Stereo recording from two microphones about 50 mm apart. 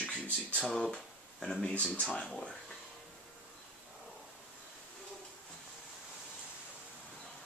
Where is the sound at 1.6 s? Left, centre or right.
Left.